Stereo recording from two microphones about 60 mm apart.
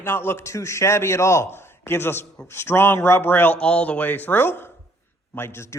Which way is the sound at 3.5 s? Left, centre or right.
Centre.